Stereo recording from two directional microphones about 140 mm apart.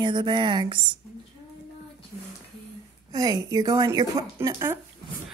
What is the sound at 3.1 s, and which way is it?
A woman's voice, 25° right (ahead or behind).